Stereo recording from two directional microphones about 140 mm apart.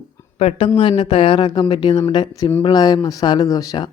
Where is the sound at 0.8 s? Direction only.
35° left (ahead or behind).